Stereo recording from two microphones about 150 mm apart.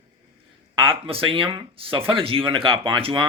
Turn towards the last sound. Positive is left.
turn(degrees=-35)  # may be behind; listen again after turning